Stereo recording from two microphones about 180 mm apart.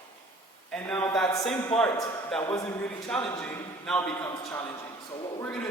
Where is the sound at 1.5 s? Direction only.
5° left (ahead or behind).